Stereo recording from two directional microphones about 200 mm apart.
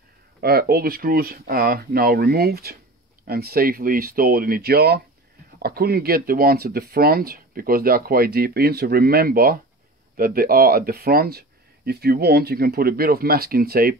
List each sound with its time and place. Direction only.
0.4 s speech: 50° right (ahead or behind)